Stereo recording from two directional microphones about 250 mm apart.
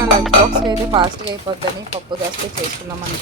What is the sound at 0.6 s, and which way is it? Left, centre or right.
Dishes, centre.